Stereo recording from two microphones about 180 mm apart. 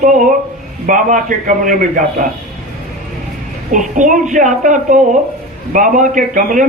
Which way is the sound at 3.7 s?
45° right (ahead or behind).